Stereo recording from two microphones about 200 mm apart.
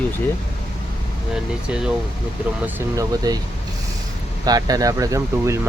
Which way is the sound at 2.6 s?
15° right (ahead or behind).